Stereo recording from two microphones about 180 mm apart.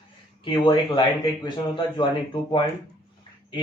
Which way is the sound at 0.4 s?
25° left (ahead or behind).